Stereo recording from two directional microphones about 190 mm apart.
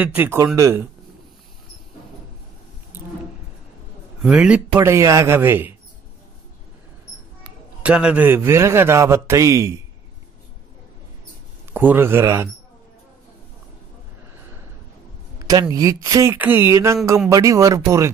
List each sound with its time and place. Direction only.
0.0 s a man's voice: 10° right (ahead or behind)
4.2 s a man's voice: 5° right (ahead or behind)
7.8 s a man's voice: 5° right (ahead or behind)
11.7 s a man's voice: 10° right (ahead or behind)
15.3 s a sound: 20° right (ahead or behind)
15.7 s a man's voice: 20° right (ahead or behind)